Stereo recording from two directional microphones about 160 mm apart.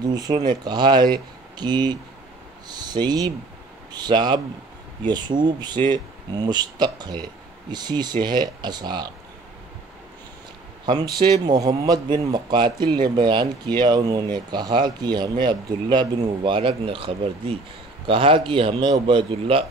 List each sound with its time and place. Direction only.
0.0 s speech: 25° right (ahead or behind)
10.9 s speech: 25° right (ahead or behind)